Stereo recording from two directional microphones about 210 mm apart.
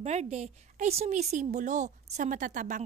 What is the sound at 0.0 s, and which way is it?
A woman's voice, 30° right (ahead or behind).